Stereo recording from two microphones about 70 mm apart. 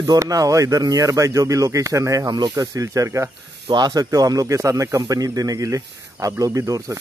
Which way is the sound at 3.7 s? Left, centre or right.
Right.